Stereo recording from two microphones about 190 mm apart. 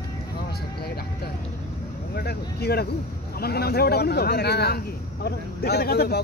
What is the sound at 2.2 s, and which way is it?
Speech, 55° left (ahead or behind).